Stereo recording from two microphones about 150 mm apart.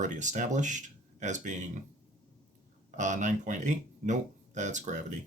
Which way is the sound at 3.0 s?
55° right (ahead or behind).